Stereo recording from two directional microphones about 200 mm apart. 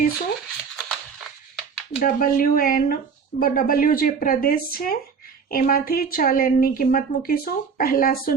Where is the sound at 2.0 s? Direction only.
45° left (ahead or behind).